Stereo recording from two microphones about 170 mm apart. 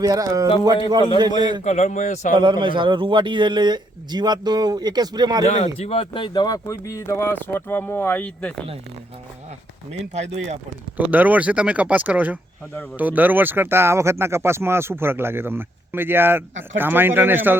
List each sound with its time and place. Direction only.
0.0 s a man's voice: 20° right (ahead or behind)
1.6 s a man's voice: 45° left (ahead or behind)
2.3 s a man's voice: 30° right (ahead or behind)
5.5 s speech: 40° left (ahead or behind); by 8.6 s 5° left (ahead or behind)
9.9 s speech: 40° right (ahead or behind)
10.9 s speech: 10° right (ahead or behind)